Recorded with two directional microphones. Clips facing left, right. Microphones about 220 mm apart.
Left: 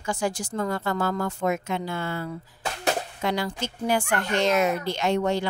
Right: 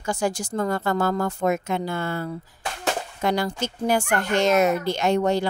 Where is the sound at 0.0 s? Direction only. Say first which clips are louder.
Right 2 dB; 40° right (ahead or behind).